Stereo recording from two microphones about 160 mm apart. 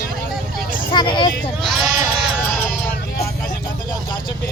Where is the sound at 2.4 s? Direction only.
10° left (ahead or behind).